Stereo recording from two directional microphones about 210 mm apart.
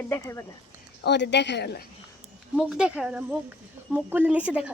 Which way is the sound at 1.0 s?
55° left (ahead or behind).